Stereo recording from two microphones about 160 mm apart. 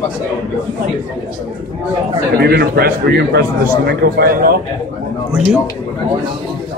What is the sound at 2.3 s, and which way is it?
A man's voice, 75° right (ahead or behind).